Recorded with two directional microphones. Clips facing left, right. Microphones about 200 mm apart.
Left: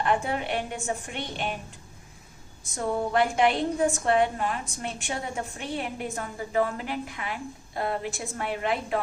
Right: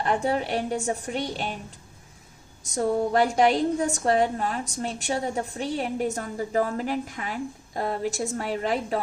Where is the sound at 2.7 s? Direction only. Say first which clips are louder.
Right 3 dB; 40° right (ahead or behind).